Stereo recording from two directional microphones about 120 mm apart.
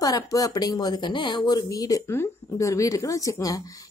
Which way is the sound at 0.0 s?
30° left (ahead or behind).